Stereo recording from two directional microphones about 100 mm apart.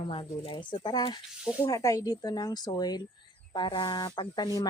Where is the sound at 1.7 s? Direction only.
35° left (ahead or behind).